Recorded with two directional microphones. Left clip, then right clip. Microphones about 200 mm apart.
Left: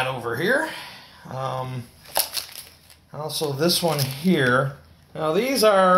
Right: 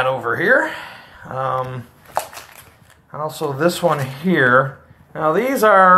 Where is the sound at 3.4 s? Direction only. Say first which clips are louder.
Right 4 dB; 10° right (ahead or behind).